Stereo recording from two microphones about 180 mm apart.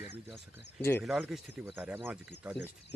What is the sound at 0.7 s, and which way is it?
Speech, 10° left (ahead or behind).